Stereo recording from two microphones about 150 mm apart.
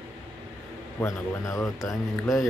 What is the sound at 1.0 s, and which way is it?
Speech, 20° left (ahead or behind).